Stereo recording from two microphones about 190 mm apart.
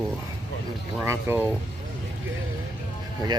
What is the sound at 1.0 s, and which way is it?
Speech, 15° right (ahead or behind).